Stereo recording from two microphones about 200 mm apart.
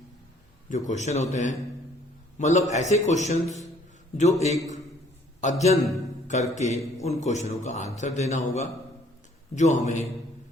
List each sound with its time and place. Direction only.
0.7 s a man's voice: 35° left (ahead or behind)